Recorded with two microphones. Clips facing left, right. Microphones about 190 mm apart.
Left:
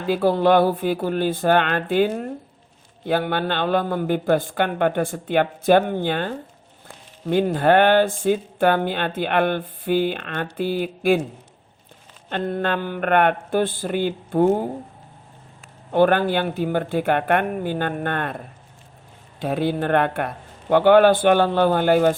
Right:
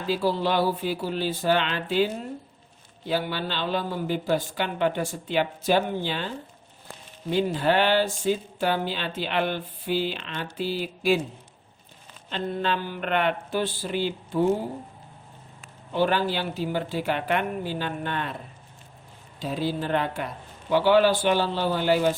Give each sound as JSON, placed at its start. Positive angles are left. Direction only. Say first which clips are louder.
{"t": 0.1, "sound": "a man's voice", "louder": "left 8 dB", "side_deg": 55}
{"t": 12.3, "sound": "speech", "louder": "left 4 dB", "side_deg": 55}
{"t": 15.9, "sound": "a man's voice", "louder": "left 7 dB", "side_deg": 55}